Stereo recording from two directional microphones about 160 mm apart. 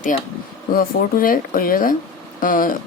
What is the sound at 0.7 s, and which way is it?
A woman's voice, 60° left (ahead or behind).